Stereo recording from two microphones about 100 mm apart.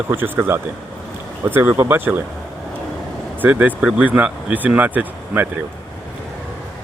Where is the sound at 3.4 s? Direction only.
15° right (ahead or behind).